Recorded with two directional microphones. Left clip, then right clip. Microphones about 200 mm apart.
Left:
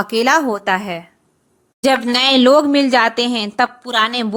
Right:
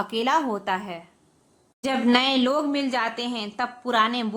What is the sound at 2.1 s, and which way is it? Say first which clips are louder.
A woman's voice: left 10 dB; 40° left (ahead or behind).